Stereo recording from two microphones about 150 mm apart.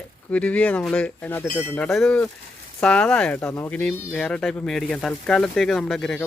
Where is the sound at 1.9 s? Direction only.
Centre (ahead or behind).